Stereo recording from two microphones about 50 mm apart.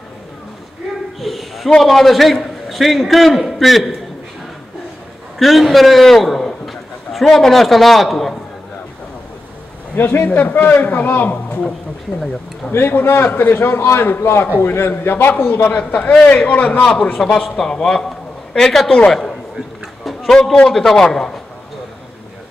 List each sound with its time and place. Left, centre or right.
1.2 s a man's voice: centre
5.4 s a man's voice: centre
9.9 s a man's voice: left
10.3 s a man's voice: left
12.9 s a man's voice: left
17.4 s a man's voice: centre